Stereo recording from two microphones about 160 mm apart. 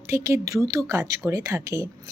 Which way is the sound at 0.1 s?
15° right (ahead or behind).